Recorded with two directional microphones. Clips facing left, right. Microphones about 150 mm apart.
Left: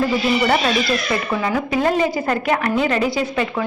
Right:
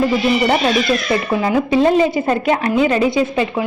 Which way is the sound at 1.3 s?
25° right (ahead or behind).